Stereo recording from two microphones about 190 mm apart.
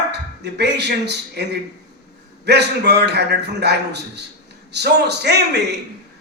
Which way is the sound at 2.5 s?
60° right (ahead or behind).